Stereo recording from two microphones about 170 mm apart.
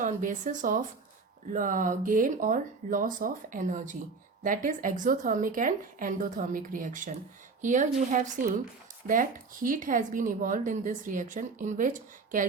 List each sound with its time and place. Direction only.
0.0 s speech: 50° right (ahead or behind)